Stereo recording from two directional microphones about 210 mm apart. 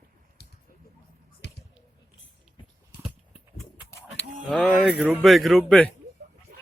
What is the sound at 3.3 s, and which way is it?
Bird, 5° left (ahead or behind).